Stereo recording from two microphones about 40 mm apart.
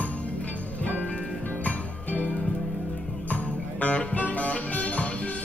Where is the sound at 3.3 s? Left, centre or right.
Left.